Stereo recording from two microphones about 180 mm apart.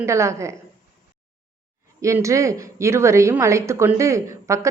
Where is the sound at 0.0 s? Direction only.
15° right (ahead or behind).